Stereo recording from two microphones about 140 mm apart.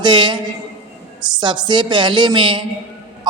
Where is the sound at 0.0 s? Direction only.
35° right (ahead or behind).